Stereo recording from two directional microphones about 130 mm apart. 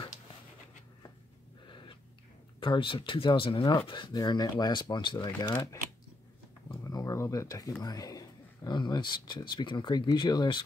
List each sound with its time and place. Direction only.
2.6 s speech: 40° left (ahead or behind)
6.8 s a sound: 25° left (ahead or behind)
7.8 s speech: 30° left (ahead or behind)